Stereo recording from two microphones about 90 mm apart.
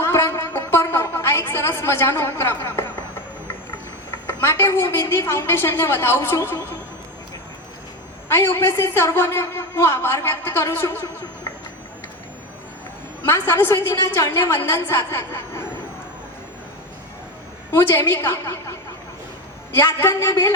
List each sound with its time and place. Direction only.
0.0 s a sound: 25° left (ahead or behind)
4.3 s a woman's voice: 25° left (ahead or behind)
8.3 s a woman's voice: 30° left (ahead or behind)
13.2 s a woman's voice: 25° left (ahead or behind)
17.7 s a woman's voice: 30° left (ahead or behind)
19.7 s a woman's voice: 30° left (ahead or behind)